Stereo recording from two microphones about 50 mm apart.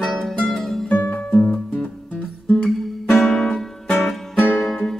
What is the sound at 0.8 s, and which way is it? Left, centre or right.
Music, left.